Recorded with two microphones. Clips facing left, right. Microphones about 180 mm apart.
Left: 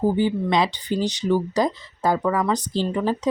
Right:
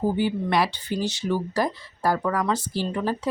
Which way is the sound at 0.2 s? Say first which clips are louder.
Left 2 dB; 20° left (ahead or behind).